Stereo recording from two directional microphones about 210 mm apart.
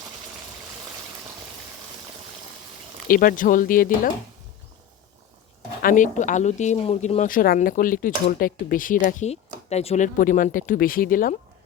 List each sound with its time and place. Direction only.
3.1 s speech: 40° left (ahead or behind)
5.8 s speech: 40° left (ahead or behind)